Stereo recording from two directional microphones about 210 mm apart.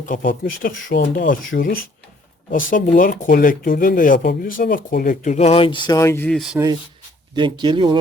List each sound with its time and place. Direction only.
0.0 s speech: 40° left (ahead or behind); by 6.6 s centre (ahead or behind)
7.3 s speech: 20° right (ahead or behind)